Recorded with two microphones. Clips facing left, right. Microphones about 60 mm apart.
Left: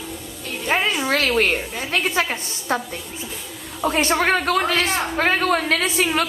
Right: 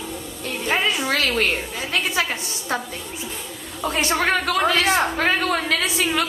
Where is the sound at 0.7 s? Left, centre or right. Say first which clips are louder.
Left 2 dB; left.